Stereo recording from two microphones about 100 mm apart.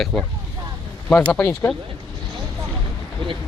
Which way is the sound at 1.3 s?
20° left (ahead or behind).